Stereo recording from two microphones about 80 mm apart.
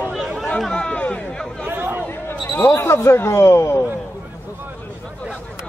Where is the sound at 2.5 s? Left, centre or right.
Left.